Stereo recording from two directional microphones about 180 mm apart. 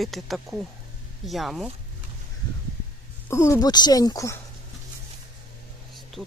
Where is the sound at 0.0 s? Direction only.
Centre (ahead or behind).